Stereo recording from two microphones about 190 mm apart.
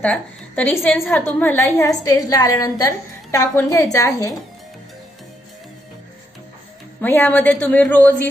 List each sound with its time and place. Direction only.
0.0 s a woman's voice: 5° left (ahead or behind)
1.4 s a woman's voice: 15° left (ahead or behind)
7.0 s a woman's voice: 10° left (ahead or behind)